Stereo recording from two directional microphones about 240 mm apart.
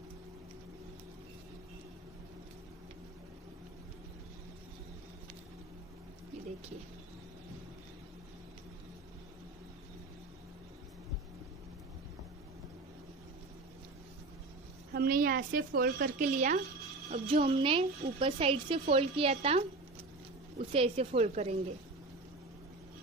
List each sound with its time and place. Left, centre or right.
15.0 s a woman's voice: right
20.7 s a woman's voice: right